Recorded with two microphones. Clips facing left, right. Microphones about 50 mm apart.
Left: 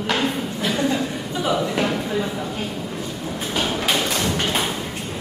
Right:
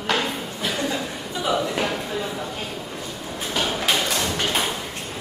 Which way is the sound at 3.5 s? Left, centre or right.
Centre.